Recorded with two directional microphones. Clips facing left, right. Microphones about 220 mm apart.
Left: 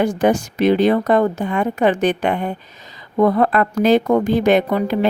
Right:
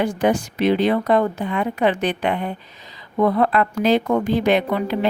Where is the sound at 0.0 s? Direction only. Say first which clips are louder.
Left 3 dB; 45° left (ahead or behind).